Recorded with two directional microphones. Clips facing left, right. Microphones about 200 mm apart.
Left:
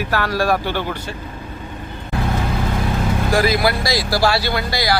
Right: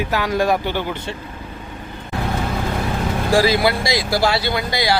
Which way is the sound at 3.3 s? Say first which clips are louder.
Right 2 dB; 30° right (ahead or behind).